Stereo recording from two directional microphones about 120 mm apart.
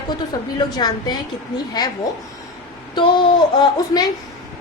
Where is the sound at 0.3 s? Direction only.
30° left (ahead or behind).